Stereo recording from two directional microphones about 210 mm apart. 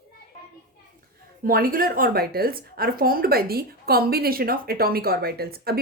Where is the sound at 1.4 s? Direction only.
45° right (ahead or behind).